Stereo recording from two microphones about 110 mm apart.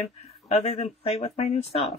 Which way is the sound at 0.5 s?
90° left.